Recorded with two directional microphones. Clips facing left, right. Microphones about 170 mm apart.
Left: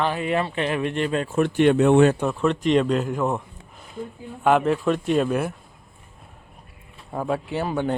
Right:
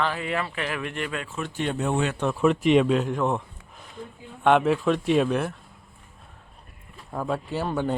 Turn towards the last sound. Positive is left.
turn(degrees=0)  # may be behind; listen again after turning